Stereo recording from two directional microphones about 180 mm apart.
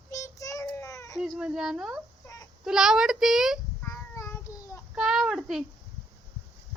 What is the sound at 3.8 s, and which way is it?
Child singing, 15° left (ahead or behind).